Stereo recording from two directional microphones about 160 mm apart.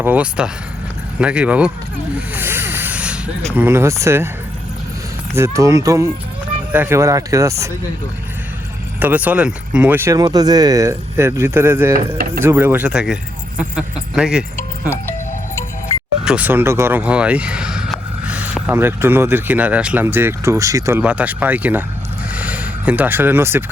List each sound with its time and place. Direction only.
0.0 s speech: 10° right (ahead or behind)
2.3 s a sound: 15° right (ahead or behind)
3.5 s speech: 15° right (ahead or behind)
5.3 s speech: 20° right (ahead or behind)
9.0 s speech: 10° right (ahead or behind)
11.9 s speech: 65° right (ahead or behind)
12.4 s speech: 15° right (ahead or behind)
16.2 s speech: 10° right (ahead or behind)